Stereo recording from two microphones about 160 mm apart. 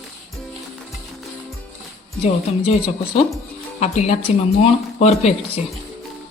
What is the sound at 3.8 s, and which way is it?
A woman's voice, 45° left (ahead or behind).